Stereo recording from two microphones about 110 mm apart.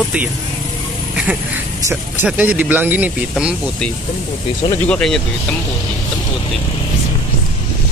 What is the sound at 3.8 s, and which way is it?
Speech, 5° left (ahead or behind).